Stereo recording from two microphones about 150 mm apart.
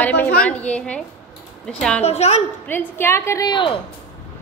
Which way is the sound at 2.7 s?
15° left (ahead or behind).